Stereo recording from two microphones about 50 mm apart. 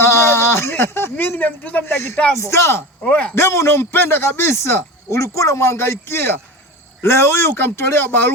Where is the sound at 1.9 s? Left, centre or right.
Left.